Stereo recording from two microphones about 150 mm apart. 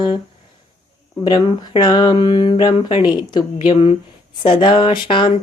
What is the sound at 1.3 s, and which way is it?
Speech, 30° left (ahead or behind).